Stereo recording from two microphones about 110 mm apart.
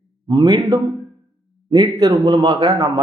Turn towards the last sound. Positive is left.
turn(degrees=-30)  # may be behind; listen again after turning